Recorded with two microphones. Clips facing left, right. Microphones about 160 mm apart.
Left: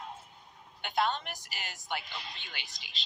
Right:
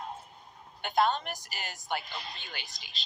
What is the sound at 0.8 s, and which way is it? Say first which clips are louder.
A woman's voice: right 4 dB; 40° right (ahead or behind).